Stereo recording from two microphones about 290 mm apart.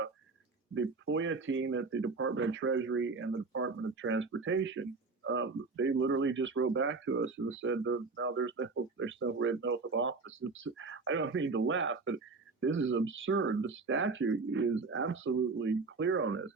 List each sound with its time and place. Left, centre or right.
0.7 s speech: right